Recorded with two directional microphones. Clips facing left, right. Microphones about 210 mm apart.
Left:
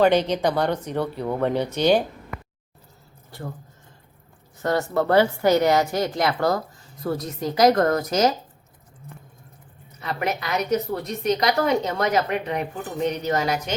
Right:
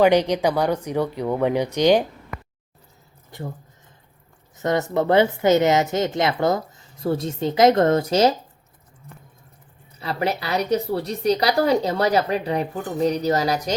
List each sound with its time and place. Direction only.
0.0 s speech: 10° right (ahead or behind)
3.3 s a woman's voice: 20° right (ahead or behind)
4.5 s a woman's voice: 20° right (ahead or behind)
10.0 s a woman's voice: 30° right (ahead or behind)